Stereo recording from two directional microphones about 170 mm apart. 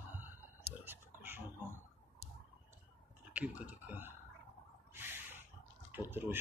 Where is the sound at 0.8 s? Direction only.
10° right (ahead or behind).